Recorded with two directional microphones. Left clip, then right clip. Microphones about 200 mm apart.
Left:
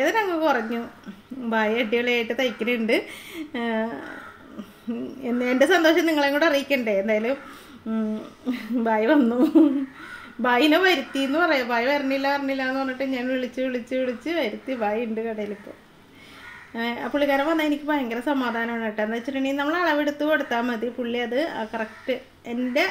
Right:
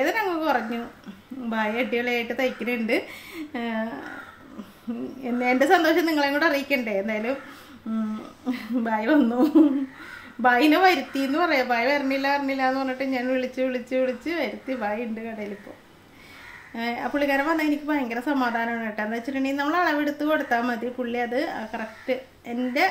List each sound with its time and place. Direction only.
0.0 s a sound: 5° left (ahead or behind)
1.5 s a woman's voice: 5° left (ahead or behind)
5.2 s a woman's voice: 5° left (ahead or behind)
8.5 s a woman's voice: centre (ahead or behind)
16.7 s a woman's voice: centre (ahead or behind)